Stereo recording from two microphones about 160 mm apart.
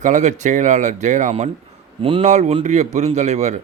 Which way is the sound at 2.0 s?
35° right (ahead or behind).